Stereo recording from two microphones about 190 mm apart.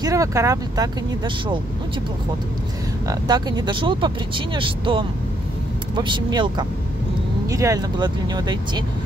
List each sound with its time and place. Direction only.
0.0 s speech: 15° right (ahead or behind)
3.1 s speech: 20° right (ahead or behind)